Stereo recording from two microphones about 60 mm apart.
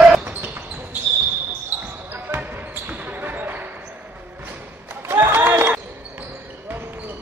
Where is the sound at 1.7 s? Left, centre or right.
Right.